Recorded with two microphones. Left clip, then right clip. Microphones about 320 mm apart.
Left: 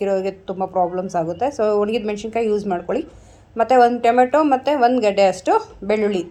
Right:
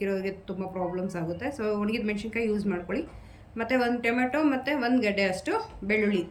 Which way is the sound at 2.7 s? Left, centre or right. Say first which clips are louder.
Left 10 dB; left.